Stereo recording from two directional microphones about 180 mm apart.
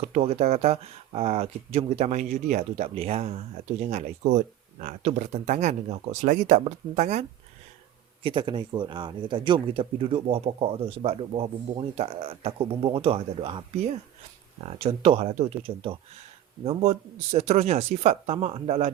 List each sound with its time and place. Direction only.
0.0 s speech: 35° right (ahead or behind)
8.2 s speech: 25° right (ahead or behind)